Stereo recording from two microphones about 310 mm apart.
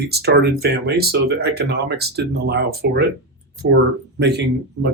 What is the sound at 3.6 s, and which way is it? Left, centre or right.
Speech, right.